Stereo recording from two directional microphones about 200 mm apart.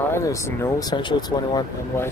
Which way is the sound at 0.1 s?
15° left (ahead or behind).